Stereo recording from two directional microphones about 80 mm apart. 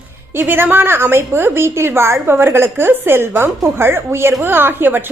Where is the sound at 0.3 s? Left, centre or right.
Right.